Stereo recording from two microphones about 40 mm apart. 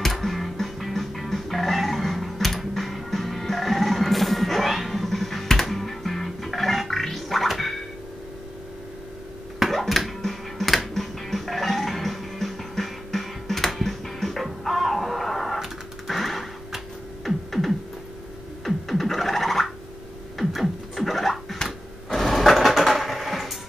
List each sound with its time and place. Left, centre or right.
0.0 s music: centre
9.6 s music: centre
15.6 s a sound: centre
17.5 s synthesizer: centre
18.6 s music: centre
21.6 s a sound: centre